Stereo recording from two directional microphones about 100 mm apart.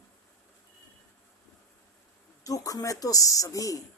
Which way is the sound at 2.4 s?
35° left (ahead or behind).